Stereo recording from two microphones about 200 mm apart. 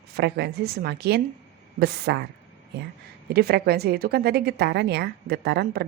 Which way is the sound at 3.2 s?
55° right (ahead or behind).